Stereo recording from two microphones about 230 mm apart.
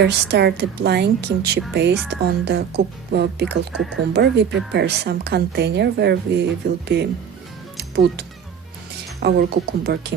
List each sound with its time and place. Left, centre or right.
0.0 s speech: right
7.8 s music: right
9.2 s speech: right